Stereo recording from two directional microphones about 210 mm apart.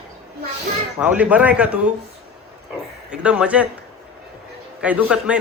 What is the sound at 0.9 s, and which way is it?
Speech, 5° right (ahead or behind).